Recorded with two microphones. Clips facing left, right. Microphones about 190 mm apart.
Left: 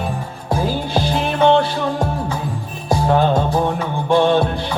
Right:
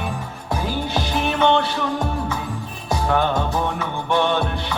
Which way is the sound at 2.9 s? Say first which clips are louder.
Left 5 dB; 30° left (ahead or behind).